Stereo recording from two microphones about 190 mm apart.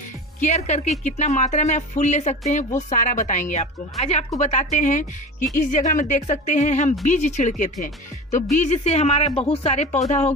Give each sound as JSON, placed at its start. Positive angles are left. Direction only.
{"t": 0.4, "sound": "speech", "side_deg": 35}